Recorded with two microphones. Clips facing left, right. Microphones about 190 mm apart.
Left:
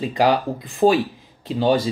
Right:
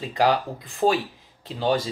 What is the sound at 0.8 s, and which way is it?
Speech, 20° left (ahead or behind).